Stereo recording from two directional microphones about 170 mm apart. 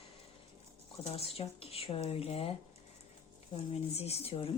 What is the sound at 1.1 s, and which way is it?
A woman's voice, 35° left (ahead or behind).